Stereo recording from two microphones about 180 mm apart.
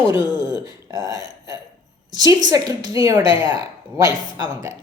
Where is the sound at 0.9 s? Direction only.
20° right (ahead or behind).